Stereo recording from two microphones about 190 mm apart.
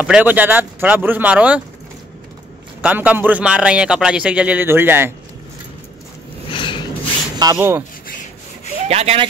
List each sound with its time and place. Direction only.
0.0 s a man's voice: 5° right (ahead or behind)
2.8 s a man's voice: 10° right (ahead or behind)
6.5 s a sound: 25° left (ahead or behind)
7.5 s a man's voice: 10° right (ahead or behind)
8.8 s speech: 35° right (ahead or behind)